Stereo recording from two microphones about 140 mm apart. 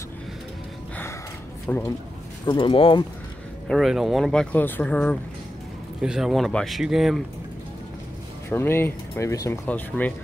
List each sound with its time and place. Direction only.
1.7 s speech: 15° left (ahead or behind)
2.4 s speech: 35° left (ahead or behind)
3.6 s speech: centre (ahead or behind)
5.9 s speech: 5° right (ahead or behind)
8.5 s speech: 15° left (ahead or behind)
9.7 s speech: 10° left (ahead or behind)